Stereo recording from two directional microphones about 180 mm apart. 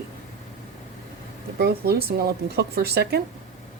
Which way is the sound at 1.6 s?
60° right (ahead or behind).